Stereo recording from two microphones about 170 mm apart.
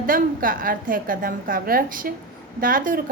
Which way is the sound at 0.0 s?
55° right (ahead or behind).